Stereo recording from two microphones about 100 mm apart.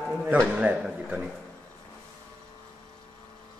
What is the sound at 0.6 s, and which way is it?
Speech, 10° right (ahead or behind).